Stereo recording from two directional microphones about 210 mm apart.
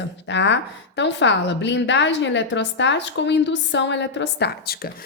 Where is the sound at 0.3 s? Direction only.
60° left (ahead or behind).